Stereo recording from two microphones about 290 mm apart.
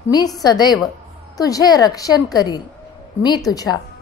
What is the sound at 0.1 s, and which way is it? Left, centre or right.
A woman's voice, centre.